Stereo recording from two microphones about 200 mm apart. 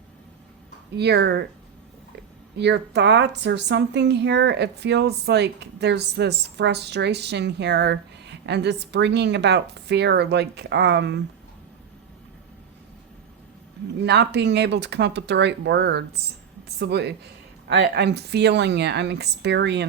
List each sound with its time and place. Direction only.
0.9 s speech: 55° right (ahead or behind)
2.6 s speech: 60° right (ahead or behind)
14.0 s speech: 60° right (ahead or behind)